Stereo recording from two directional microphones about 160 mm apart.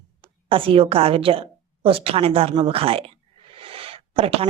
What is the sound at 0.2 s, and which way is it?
A woman's voice, 35° right (ahead or behind).